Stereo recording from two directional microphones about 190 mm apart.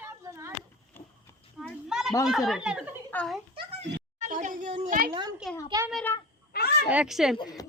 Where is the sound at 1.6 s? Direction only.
Centre (ahead or behind).